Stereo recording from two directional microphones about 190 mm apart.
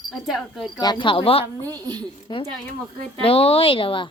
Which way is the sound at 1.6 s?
20° right (ahead or behind).